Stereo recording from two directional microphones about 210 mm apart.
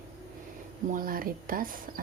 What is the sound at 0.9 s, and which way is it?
Speech, 40° right (ahead or behind).